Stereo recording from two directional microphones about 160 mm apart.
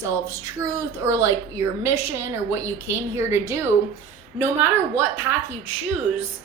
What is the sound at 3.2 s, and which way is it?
Speech, 15° right (ahead or behind).